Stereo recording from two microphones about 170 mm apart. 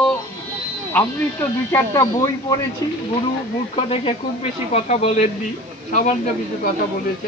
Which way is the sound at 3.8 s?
35° left (ahead or behind).